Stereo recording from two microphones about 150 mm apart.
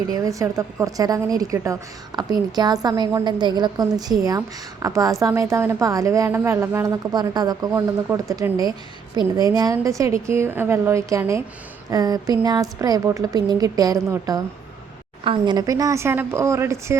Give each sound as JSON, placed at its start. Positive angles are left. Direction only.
{"t": 0.1, "sound": "a woman's voice", "side_deg": -20}